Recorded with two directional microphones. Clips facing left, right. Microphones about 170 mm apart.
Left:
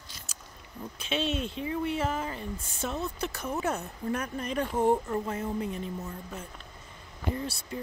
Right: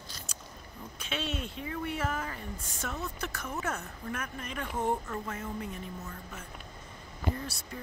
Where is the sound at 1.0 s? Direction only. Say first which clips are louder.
Left 6 dB; 25° left (ahead or behind).